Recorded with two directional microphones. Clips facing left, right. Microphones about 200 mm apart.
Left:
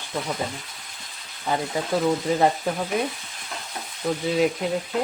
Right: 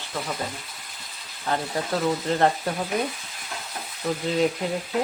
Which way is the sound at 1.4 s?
5° left (ahead or behind).